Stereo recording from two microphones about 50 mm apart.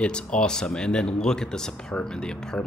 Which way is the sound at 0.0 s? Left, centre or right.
Centre.